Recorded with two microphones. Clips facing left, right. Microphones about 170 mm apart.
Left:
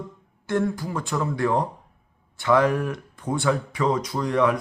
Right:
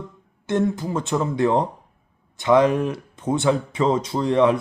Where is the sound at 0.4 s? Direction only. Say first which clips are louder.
Right 3 dB; 20° right (ahead or behind).